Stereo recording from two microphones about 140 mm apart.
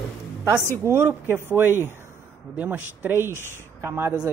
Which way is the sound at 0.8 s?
20° right (ahead or behind).